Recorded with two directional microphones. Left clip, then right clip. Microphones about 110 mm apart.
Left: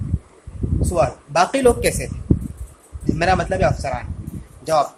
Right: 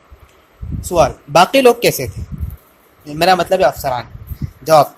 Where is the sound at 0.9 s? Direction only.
40° right (ahead or behind).